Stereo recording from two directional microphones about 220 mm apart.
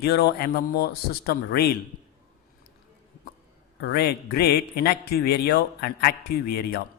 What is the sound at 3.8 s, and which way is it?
A man's voice, 45° left (ahead or behind).